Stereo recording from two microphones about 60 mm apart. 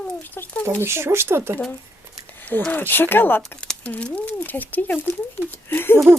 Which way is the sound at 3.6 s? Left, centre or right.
Centre.